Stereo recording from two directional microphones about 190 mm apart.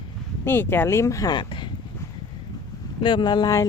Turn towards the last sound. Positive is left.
turn(degrees=20)  # may be behind; listen again after turning